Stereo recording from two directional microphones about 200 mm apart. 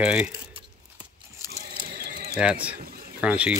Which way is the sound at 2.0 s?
50° right (ahead or behind).